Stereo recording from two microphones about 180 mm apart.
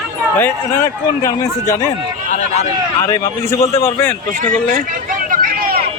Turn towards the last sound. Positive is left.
turn(degrees=-55)  # may be behind; listen again after turning